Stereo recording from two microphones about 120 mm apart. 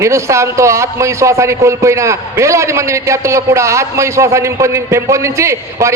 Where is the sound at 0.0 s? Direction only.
25° right (ahead or behind).